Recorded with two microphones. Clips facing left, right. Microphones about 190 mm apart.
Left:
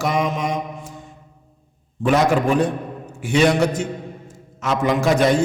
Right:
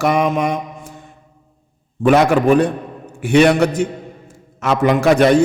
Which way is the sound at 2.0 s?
65° right (ahead or behind).